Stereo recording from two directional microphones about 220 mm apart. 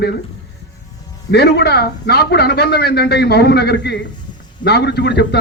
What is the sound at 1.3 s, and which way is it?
A man's voice, 50° left (ahead or behind).